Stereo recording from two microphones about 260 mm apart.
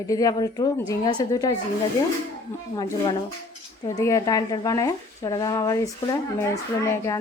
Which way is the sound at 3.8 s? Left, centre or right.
Centre.